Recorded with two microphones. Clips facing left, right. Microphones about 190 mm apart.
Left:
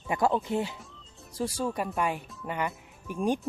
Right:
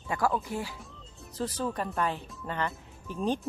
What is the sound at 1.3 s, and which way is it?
Speech, 10° left (ahead or behind).